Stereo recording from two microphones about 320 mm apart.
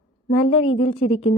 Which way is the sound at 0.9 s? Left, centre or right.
Centre.